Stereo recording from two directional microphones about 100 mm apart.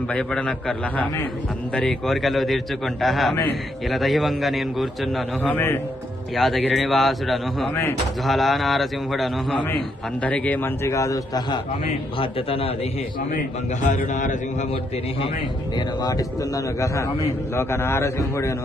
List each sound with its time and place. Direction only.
0.1 s a man's voice: 10° left (ahead or behind)
5.4 s a man's voice: 20° left (ahead or behind)
6.3 s a man's voice: centre (ahead or behind)
10.2 s a man's voice: 15° left (ahead or behind)
10.8 s a man's voice: 30° left (ahead or behind)
12.2 s a man's voice: 70° left (ahead or behind)
15.7 s a man's voice: 40° left (ahead or behind)